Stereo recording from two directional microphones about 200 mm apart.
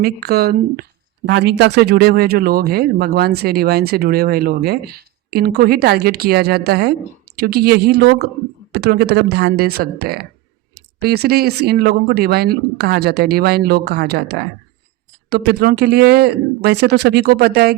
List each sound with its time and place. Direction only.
0.0 s speech: 50° right (ahead or behind)